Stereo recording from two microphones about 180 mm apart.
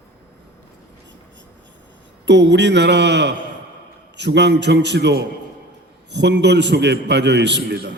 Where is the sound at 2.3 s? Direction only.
75° right (ahead or behind).